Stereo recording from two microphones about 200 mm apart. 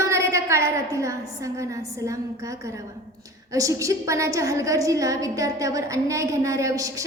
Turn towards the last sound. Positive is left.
turn(degrees=-15)  # may be behind; listen again after turning